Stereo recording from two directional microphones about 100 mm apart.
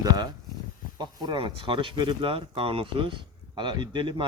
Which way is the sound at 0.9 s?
45° right (ahead or behind).